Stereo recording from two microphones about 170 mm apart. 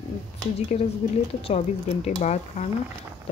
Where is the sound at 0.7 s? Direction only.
40° left (ahead or behind).